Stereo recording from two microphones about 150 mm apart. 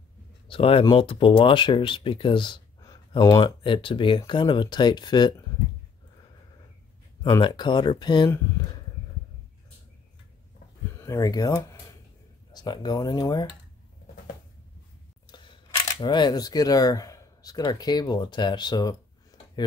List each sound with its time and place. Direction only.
0.5 s speech: 35° left (ahead or behind)
7.2 s speech: 25° left (ahead or behind)
11.0 s speech: 20° left (ahead or behind)
15.2 s single-lens reflex camera: 30° left (ahead or behind)
16.0 s speech: 30° left (ahead or behind)